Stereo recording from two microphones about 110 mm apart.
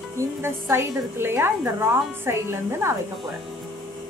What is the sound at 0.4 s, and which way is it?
A woman's voice, 20° right (ahead or behind).